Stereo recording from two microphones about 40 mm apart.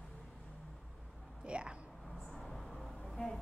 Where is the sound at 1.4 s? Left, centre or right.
Right.